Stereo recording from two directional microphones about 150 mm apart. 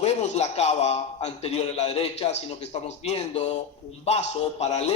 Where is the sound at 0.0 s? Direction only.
45° left (ahead or behind).